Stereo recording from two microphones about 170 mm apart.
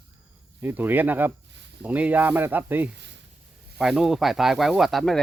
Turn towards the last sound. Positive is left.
turn(degrees=0)  # may be behind; listen again after turning